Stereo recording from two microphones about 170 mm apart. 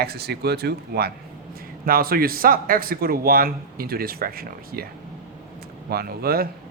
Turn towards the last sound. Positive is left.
turn(degrees=-65)  # may be behind; listen again after turning